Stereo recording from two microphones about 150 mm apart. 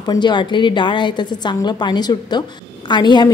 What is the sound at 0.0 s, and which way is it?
A woman's voice, 30° left (ahead or behind).